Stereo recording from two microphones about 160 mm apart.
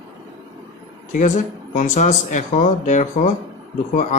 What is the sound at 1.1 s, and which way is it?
Speech, 50° left (ahead or behind).